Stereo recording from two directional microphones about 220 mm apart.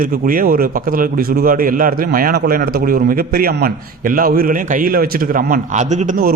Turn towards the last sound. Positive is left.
turn(degrees=-35)  # may be behind; listen again after turning